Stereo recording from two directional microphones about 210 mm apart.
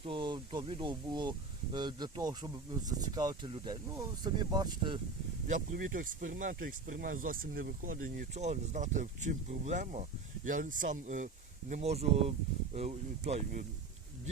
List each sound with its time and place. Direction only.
0.0 s speech: 25° right (ahead or behind)
5.5 s speech: 40° right (ahead or behind)